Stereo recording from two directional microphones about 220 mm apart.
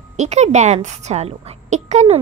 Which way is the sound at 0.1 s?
30° right (ahead or behind).